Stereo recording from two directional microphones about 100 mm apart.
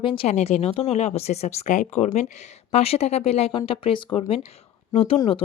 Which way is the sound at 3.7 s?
65° left (ahead or behind).